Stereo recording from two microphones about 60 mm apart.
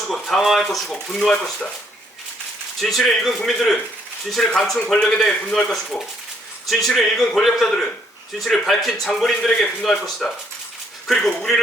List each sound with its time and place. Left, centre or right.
0.1 s a man's voice: centre
2.8 s a man's voice: centre
6.7 s a man's voice: centre